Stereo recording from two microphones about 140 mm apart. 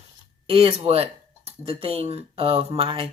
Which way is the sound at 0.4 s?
40° right (ahead or behind).